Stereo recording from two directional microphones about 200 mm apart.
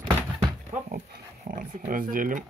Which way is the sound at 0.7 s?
45° right (ahead or behind).